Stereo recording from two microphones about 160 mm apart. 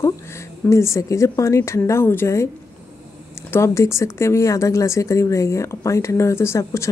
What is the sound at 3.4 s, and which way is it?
Speech, 15° left (ahead or behind).